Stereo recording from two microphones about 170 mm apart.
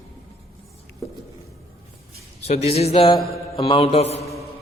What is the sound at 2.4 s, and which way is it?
A man's voice, 40° left (ahead or behind).